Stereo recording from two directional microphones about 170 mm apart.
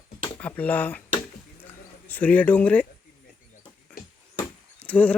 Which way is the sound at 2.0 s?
10° left (ahead or behind).